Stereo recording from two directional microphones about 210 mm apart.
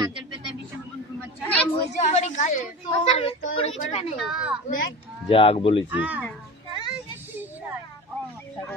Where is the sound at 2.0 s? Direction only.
35° left (ahead or behind).